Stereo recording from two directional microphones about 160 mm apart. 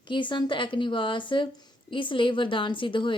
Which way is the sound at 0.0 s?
30° left (ahead or behind).